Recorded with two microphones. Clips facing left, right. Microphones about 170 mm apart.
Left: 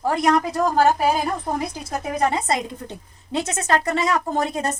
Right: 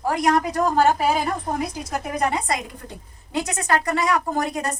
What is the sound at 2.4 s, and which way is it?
A woman's voice, 25° left (ahead or behind).